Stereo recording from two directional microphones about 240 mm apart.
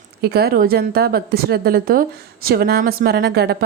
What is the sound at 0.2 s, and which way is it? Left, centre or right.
A woman's voice, right.